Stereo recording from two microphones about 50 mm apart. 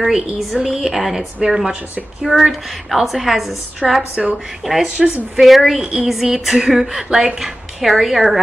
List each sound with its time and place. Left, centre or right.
0.0 s a woman's voice: centre
4.1 s a woman's voice: right
5.4 s speech: centre